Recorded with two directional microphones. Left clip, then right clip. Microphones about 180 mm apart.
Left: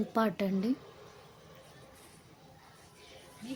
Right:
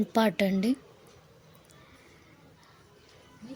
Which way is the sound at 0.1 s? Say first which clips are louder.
Right 6 dB; 15° right (ahead or behind).